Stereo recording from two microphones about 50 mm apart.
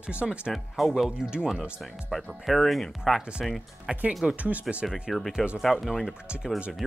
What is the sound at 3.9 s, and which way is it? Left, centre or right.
Speech, centre.